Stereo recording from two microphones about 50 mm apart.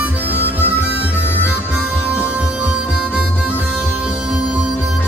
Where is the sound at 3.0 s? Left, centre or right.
Right.